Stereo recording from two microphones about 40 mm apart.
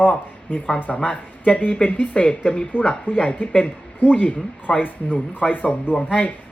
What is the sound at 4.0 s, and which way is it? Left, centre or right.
Speech, left.